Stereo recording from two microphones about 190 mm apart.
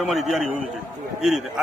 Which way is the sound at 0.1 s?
Centre (ahead or behind).